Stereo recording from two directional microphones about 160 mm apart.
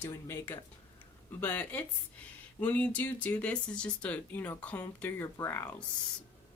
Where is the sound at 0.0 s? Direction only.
15° left (ahead or behind).